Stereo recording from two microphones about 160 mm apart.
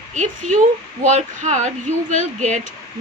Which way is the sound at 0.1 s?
50° right (ahead or behind).